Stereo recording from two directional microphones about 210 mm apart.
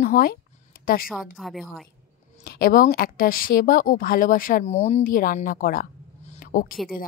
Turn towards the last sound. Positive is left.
turn(degrees=40)  # may be behind; listen again after turning